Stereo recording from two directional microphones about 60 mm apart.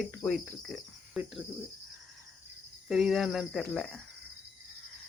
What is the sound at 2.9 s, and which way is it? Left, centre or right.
Cricket, centre.